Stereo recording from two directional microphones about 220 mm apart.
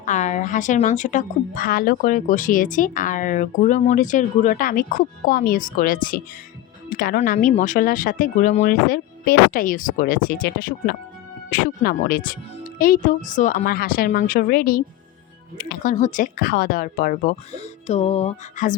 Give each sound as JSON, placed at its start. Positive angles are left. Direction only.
{"t": 0.0, "sound": "a woman's voice", "side_deg": 35}